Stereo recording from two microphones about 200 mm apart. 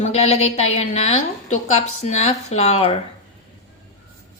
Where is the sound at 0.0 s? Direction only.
30° left (ahead or behind).